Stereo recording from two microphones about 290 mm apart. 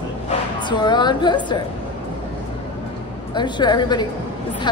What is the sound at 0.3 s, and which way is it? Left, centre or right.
Speech, centre.